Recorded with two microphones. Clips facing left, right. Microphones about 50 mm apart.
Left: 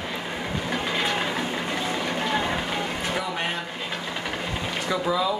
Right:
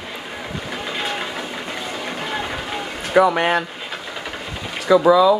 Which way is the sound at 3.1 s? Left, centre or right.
Right.